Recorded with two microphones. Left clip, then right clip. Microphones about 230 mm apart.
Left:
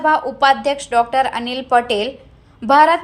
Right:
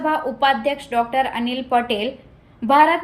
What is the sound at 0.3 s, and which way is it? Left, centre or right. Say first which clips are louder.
A woman's voice: left 4 dB; centre.